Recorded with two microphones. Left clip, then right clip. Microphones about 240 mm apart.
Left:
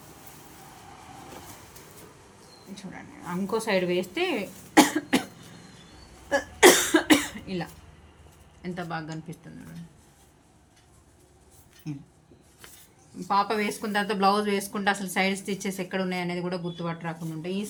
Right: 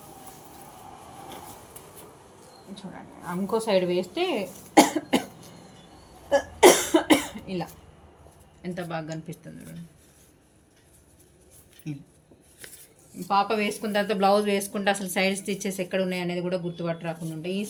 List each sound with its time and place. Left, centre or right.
2.7 s a woman's voice: left
6.3 s cough: centre
8.6 s speech: centre
11.9 s speech: centre
13.2 s speech: centre